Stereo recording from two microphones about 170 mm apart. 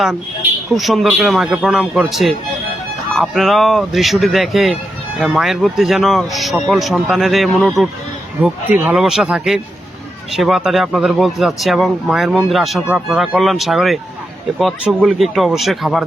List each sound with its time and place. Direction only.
0.8 s speech: centre (ahead or behind)